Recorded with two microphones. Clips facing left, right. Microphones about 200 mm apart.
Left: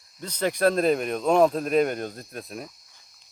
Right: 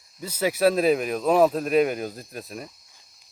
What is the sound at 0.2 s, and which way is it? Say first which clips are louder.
Speech: right 1 dB; 5° right (ahead or behind).